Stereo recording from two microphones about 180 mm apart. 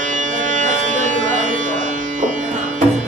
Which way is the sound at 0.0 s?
45° right (ahead or behind).